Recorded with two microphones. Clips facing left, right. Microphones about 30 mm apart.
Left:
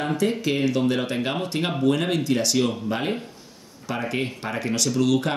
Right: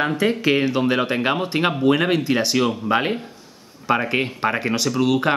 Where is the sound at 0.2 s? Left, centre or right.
Right.